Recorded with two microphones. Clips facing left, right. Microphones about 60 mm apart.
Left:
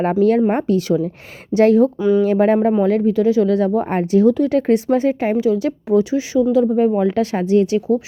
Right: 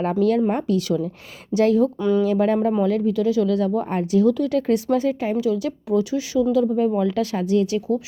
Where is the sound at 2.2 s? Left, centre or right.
Left.